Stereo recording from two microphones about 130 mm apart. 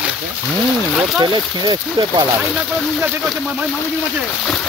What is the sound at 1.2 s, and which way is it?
Speech, 35° right (ahead or behind).